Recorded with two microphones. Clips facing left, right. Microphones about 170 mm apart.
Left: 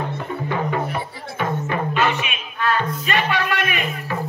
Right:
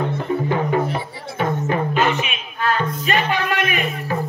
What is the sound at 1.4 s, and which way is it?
Music, 45° right (ahead or behind).